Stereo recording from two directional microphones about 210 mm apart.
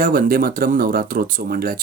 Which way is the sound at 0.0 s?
45° right (ahead or behind).